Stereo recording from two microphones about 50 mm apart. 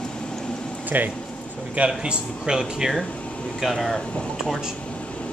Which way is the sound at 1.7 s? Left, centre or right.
Centre.